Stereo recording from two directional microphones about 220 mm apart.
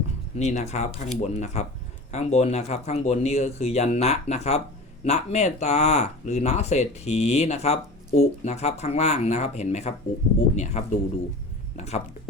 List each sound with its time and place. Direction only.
0.3 s speech: 30° left (ahead or behind)